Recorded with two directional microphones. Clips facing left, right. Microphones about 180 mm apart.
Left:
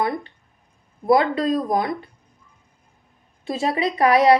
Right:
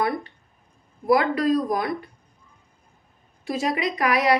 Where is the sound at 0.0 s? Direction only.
20° left (ahead or behind).